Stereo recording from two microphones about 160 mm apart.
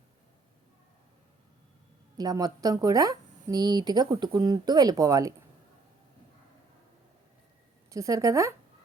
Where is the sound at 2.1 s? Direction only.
25° right (ahead or behind).